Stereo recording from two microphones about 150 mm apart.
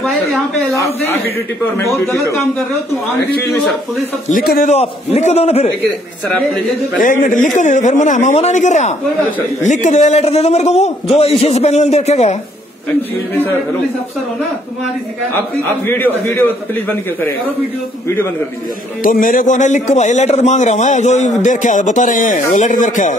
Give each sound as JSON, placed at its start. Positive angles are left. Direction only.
{"t": 1.8, "sound": "a man's voice", "side_deg": 20}
{"t": 4.3, "sound": "a man's voice", "side_deg": 70}
{"t": 4.6, "sound": "a man's voice", "side_deg": 45}
{"t": 5.9, "sound": "a man's voice", "side_deg": 5}
{"t": 7.0, "sound": "a man's voice", "side_deg": 60}
{"t": 15.3, "sound": "a man's voice", "side_deg": 15}
{"t": 19.0, "sound": "a man's voice", "side_deg": 65}